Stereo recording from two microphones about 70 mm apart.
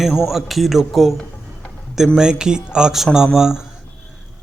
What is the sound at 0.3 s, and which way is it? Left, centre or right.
A man's voice, centre.